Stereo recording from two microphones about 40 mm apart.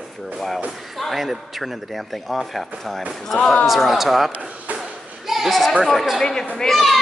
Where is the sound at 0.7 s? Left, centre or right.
Centre.